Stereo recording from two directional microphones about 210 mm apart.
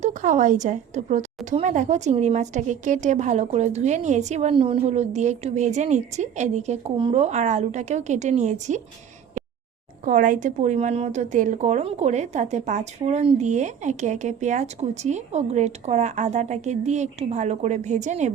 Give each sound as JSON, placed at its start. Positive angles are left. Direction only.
{"t": 0.0, "sound": "a woman's voice", "side_deg": -35}
{"t": 10.1, "sound": "a woman's voice", "side_deg": -40}